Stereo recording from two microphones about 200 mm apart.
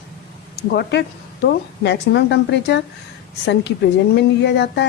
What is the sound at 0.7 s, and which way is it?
Speech, 55° left (ahead or behind).